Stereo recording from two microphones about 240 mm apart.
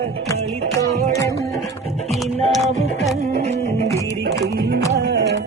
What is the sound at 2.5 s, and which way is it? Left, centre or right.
Music, centre.